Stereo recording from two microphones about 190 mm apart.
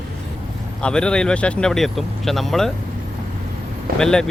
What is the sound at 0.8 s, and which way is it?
Speech, 5° left (ahead or behind).